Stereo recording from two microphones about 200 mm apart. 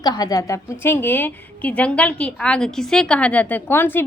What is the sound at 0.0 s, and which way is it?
A woman's voice, 20° left (ahead or behind).